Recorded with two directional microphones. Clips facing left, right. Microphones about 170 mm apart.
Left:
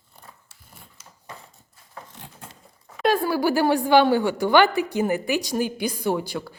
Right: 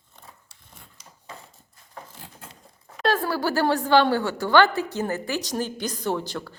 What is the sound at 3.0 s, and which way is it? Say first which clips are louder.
A woman's voice: left 3 dB; 15° left (ahead or behind).